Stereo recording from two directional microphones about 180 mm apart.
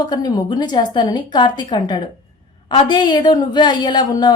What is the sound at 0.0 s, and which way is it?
A woman's voice, 25° left (ahead or behind).